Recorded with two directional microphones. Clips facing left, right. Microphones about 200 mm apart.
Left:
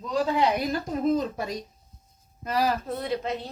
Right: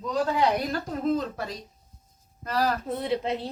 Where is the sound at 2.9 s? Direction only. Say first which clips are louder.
Right 1 dB; 25° right (ahead or behind).